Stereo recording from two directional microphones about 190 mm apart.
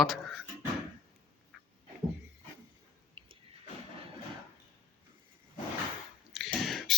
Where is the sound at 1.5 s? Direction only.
Centre (ahead or behind).